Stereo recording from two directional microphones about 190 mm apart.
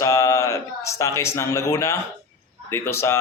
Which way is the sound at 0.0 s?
15° left (ahead or behind).